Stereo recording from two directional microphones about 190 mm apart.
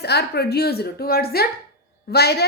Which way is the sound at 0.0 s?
60° left (ahead or behind).